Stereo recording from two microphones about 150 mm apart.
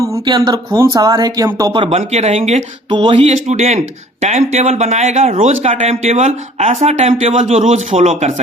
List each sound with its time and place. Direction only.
0.3 s speech: 30° right (ahead or behind)
1.7 s speech: 40° right (ahead or behind)
2.9 s speech: 35° right (ahead or behind)
3.2 s speech: 50° right (ahead or behind)